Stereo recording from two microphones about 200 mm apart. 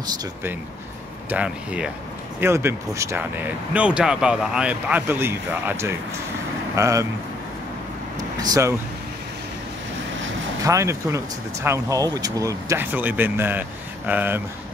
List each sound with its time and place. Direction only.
0.0 s speech: 10° right (ahead or behind)
8.4 s speech: 15° right (ahead or behind)
10.6 s speech: 15° right (ahead or behind)